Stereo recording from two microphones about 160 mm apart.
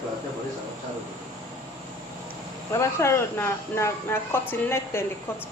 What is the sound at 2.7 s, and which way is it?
Speech, 15° left (ahead or behind).